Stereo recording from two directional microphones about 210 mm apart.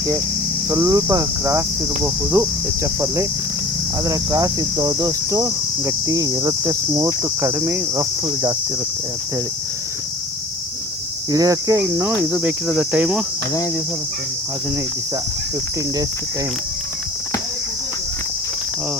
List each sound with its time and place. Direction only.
0.7 s cricket: 15° right (ahead or behind)
11.3 s cricket: 15° right (ahead or behind)